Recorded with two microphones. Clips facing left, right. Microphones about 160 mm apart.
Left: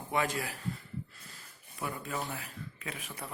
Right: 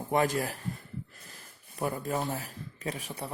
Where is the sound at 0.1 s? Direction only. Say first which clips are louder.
Right 5 dB; 40° right (ahead or behind).